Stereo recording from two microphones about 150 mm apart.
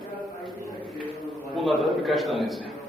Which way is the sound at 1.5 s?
Centre (ahead or behind).